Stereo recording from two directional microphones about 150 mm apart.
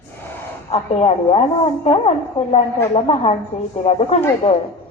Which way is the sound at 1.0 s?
40° left (ahead or behind).